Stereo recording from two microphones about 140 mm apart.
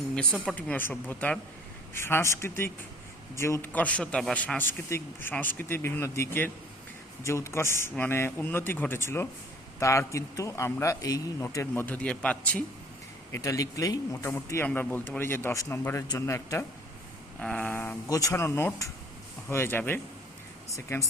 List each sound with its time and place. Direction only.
0.2 s a man's voice: 5° left (ahead or behind)
13.3 s a man's voice: 25° left (ahead or behind)
18.1 s a man's voice: 25° left (ahead or behind)